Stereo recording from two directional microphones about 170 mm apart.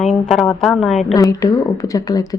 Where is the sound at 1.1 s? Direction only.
20° left (ahead or behind).